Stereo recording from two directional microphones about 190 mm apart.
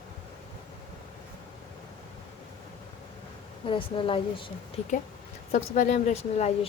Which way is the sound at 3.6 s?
25° left (ahead or behind).